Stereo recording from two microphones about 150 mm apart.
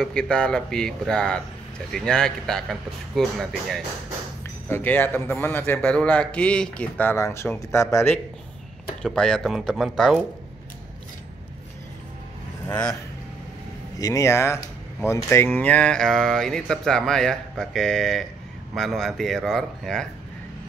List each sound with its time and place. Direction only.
0.0 s speech: 5° left (ahead or behind)
4.6 s speech: 15° left (ahead or behind)
9.0 s speech: 5° left (ahead or behind)
12.6 s speech: 25° left (ahead or behind)
13.9 s speech: 25° left (ahead or behind); by 20.1 s 5° left (ahead or behind)